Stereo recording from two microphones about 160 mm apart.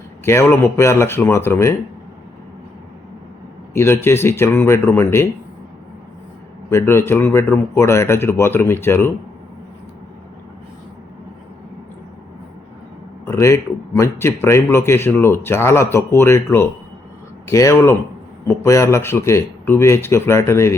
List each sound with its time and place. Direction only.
0.3 s a man's voice: 15° left (ahead or behind)
3.8 s a man's voice: 15° left (ahead or behind)
6.7 s a man's voice: 15° left (ahead or behind)
13.2 s a man's voice: 15° left (ahead or behind)